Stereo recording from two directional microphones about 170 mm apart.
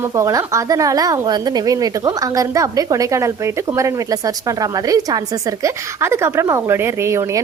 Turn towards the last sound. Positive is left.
turn(degrees=-15)  # may be behind; listen again after turning